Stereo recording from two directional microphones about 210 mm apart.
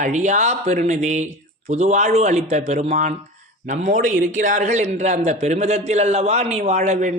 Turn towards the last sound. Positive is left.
turn(degrees=-35)  # may be behind; listen again after turning